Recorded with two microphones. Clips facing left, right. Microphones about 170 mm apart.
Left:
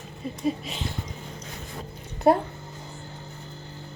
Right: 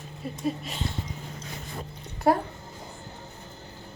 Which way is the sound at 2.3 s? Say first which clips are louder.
Left 3 dB; 25° left (ahead or behind).